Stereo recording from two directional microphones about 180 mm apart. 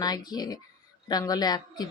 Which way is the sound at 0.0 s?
20° left (ahead or behind).